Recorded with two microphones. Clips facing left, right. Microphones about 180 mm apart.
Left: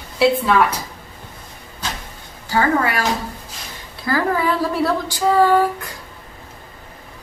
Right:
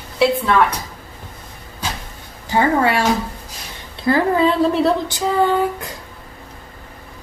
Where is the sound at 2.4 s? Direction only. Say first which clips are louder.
Right 2 dB; 25° right (ahead or behind).